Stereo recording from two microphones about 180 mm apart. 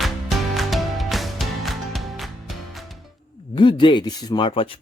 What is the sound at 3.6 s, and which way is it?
Speech, 25° left (ahead or behind).